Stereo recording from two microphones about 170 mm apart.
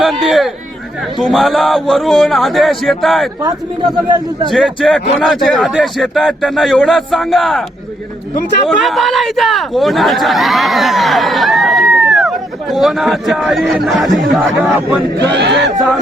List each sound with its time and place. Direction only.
0.0 s speech: centre (ahead or behind)
4.4 s speech: centre (ahead or behind)
8.6 s speech: centre (ahead or behind)
15.2 s speech: 85° right